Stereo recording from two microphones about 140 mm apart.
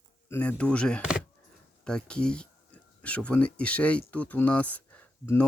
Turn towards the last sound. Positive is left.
turn(degrees=10)  # may be behind; listen again after turning